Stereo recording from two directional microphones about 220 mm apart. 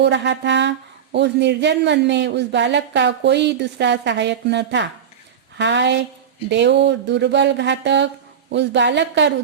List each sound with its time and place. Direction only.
0.0 s speech: 55° right (ahead or behind)